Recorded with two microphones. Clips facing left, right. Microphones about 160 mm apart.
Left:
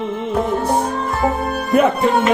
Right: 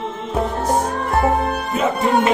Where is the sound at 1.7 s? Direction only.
60° left (ahead or behind).